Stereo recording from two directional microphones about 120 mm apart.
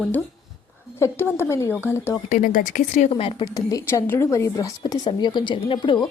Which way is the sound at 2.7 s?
85° left.